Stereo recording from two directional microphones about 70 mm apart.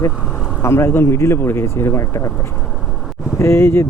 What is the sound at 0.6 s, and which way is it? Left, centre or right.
Speech, left.